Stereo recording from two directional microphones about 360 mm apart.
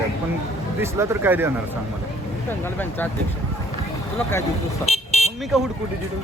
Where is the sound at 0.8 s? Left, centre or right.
Centre.